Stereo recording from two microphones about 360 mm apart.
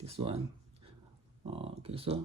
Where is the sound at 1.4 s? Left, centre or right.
Centre.